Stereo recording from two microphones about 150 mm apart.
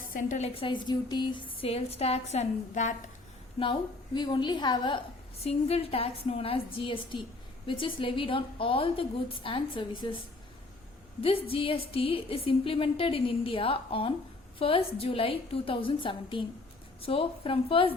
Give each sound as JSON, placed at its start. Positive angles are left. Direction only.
{"t": 0.0, "sound": "a woman's voice", "side_deg": 65}
{"t": 3.6, "sound": "a woman's voice", "side_deg": 30}
{"t": 11.2, "sound": "a woman's voice", "side_deg": 40}